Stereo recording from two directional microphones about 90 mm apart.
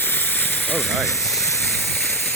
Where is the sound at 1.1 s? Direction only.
Centre (ahead or behind).